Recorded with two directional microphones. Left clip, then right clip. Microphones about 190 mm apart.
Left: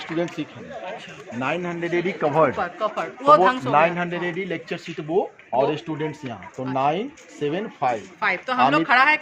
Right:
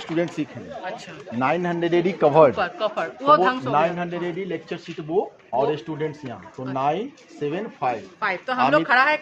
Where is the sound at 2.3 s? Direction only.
25° right (ahead or behind).